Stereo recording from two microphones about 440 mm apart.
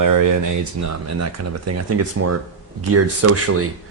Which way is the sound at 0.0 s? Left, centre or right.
Right.